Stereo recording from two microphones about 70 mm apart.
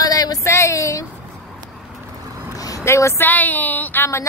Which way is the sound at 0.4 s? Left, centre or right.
Left.